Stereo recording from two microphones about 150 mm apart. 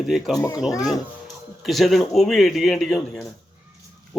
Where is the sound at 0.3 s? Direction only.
25° left (ahead or behind).